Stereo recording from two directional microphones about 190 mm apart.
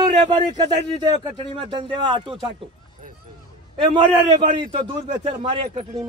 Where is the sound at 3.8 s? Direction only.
25° right (ahead or behind).